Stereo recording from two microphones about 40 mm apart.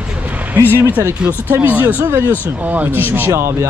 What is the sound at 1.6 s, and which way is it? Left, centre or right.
Speech, right.